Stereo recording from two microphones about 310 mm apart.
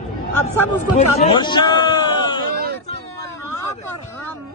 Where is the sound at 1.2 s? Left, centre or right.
Centre.